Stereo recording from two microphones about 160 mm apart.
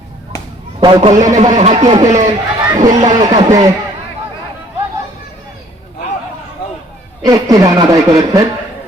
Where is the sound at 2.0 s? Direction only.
45° right (ahead or behind).